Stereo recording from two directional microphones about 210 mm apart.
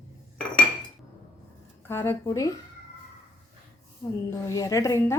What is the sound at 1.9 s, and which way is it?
Speech, 10° left (ahead or behind).